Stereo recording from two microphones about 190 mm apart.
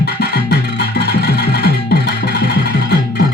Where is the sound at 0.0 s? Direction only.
60° left (ahead or behind).